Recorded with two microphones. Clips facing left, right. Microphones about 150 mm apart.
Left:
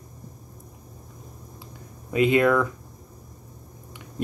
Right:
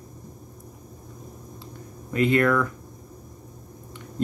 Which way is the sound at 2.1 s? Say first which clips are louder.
Left 1 dB; 15° left (ahead or behind).